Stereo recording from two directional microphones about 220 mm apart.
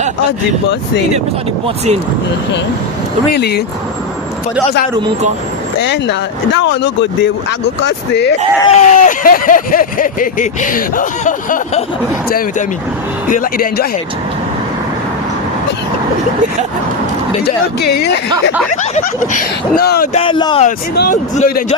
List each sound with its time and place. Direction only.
1.6 s speech: 30° right (ahead or behind)
3.3 s speech: 45° left (ahead or behind)
5.8 s speech: 55° left (ahead or behind)
8.6 s speech: 30° left (ahead or behind)
13.3 s speech: 40° left (ahead or behind)
17.4 s speech: 45° left (ahead or behind)
18.9 s speech: 35° left (ahead or behind)
20.1 s speech: 20° left (ahead or behind)
20.7 s speech: 45° left (ahead or behind)
21.3 s speech: 30° left (ahead or behind)